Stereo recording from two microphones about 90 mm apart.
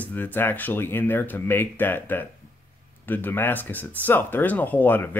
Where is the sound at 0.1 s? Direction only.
20° left (ahead or behind).